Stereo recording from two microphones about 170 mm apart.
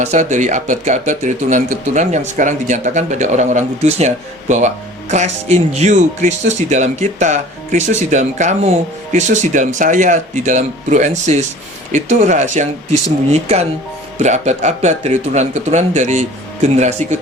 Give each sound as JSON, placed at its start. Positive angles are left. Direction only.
{"t": 0.0, "sound": "speech", "side_deg": -45}